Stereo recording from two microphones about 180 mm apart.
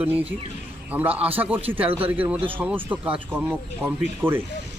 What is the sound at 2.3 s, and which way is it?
Speech, 30° right (ahead or behind).